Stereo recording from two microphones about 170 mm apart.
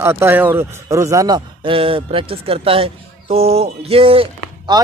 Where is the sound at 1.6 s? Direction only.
35° right (ahead or behind).